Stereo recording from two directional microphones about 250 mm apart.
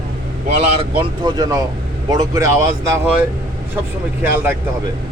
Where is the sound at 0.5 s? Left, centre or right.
Right.